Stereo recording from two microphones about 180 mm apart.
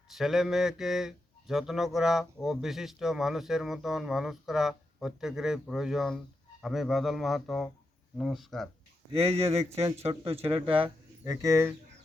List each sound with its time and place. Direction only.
0.1 s a man's voice: centre (ahead or behind)
9.1 s speech: 35° right (ahead or behind)
11.2 s speech: 15° right (ahead or behind)